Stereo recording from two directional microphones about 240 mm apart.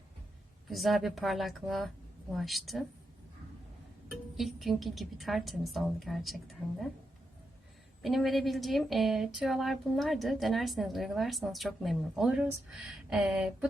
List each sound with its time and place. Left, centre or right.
0.7 s speech: centre
4.4 s speech: centre
8.0 s speech: centre